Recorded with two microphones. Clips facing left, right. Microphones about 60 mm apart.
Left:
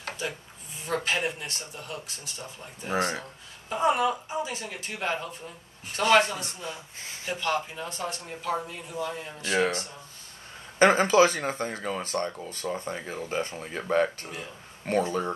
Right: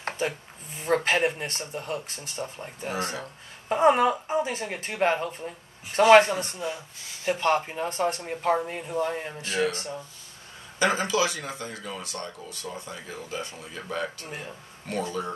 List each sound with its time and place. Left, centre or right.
0.7 s a woman's voice: right
2.9 s speech: left
3.2 s a woman's voice: right
9.4 s speech: left